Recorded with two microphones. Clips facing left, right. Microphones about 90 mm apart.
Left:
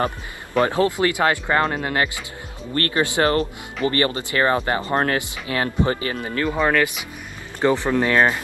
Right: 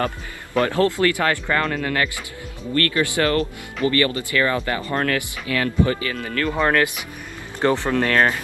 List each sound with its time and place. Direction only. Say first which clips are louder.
0.6 s speech: even; 20° left (ahead or behind)
7.6 s speech: left 1 dB; 15° left (ahead or behind)